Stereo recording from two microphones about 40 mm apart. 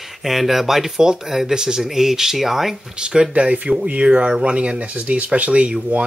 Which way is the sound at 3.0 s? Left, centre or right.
Right.